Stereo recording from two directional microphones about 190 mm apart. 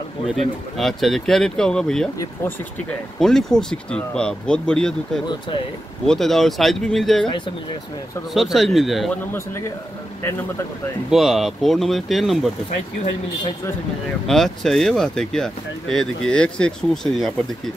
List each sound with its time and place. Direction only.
0.7 s speech: centre (ahead or behind)
7.2 s speech: 25° left (ahead or behind)
8.3 s speech: centre (ahead or behind)
11.1 s speech: centre (ahead or behind)
14.2 s speech: centre (ahead or behind)